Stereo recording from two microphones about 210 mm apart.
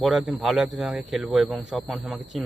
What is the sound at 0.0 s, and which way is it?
Speech, centre (ahead or behind).